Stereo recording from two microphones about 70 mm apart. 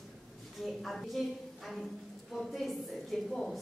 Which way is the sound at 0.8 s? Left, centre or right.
Centre.